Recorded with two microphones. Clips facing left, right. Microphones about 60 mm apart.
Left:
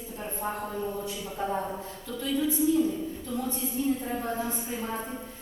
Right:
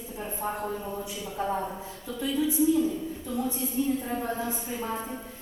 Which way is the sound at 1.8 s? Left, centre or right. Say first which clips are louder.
Right 1 dB; centre.